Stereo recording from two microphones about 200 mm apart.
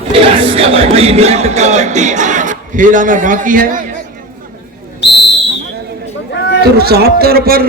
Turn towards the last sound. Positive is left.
turn(degrees=-50)  # may be behind; listen again after turning